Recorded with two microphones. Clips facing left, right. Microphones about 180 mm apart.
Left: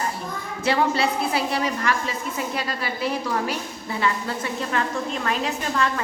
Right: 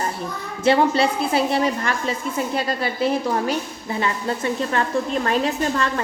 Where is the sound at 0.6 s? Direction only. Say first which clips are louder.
Right 4 dB; 25° right (ahead or behind).